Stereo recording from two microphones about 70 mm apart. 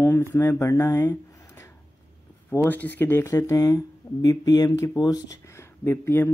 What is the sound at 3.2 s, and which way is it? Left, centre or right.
Speech, left.